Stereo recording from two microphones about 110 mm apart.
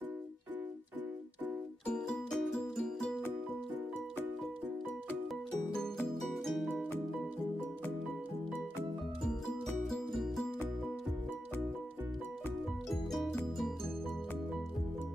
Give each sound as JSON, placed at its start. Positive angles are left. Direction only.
{"t": 1.9, "sound": "music", "side_deg": 5}
{"t": 5.8, "sound": "music", "side_deg": 0}
{"t": 9.8, "sound": "music", "side_deg": 0}
{"t": 12.9, "sound": "music", "side_deg": 5}